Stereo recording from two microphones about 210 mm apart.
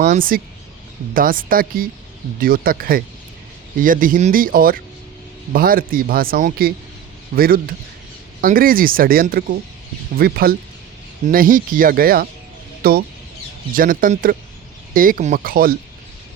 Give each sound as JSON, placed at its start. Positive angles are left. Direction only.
{"t": 0.0, "sound": "speech", "side_deg": -40}